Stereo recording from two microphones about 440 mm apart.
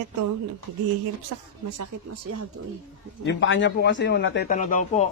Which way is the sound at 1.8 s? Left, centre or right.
Right.